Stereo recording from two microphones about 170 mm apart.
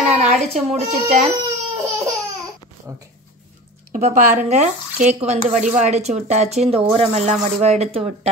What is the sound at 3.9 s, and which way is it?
Speech, 45° right (ahead or behind).